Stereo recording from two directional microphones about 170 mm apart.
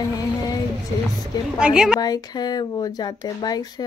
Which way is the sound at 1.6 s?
5° right (ahead or behind).